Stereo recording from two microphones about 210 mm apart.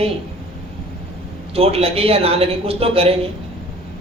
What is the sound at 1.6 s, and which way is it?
A man's voice, 30° right (ahead or behind).